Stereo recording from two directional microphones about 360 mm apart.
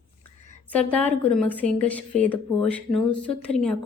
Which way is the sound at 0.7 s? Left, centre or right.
Centre.